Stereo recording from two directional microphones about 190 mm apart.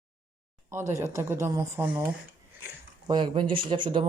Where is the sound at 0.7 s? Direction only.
15° right (ahead or behind).